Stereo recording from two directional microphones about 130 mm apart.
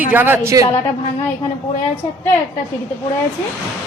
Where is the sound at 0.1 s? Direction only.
15° right (ahead or behind).